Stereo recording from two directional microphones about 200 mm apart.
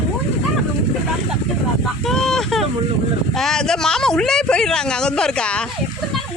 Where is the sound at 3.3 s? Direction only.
Centre (ahead or behind).